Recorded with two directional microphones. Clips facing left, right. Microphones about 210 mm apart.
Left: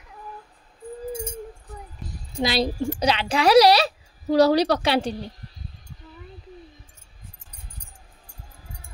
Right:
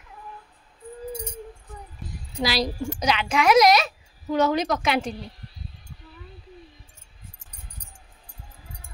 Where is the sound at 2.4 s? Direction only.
25° left (ahead or behind).